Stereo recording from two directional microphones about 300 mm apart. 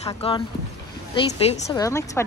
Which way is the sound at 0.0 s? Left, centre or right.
Centre.